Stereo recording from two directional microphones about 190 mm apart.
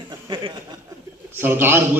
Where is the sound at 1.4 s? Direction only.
10° right (ahead or behind).